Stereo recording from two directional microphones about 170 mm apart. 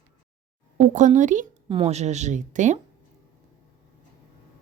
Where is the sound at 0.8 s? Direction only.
45° right (ahead or behind).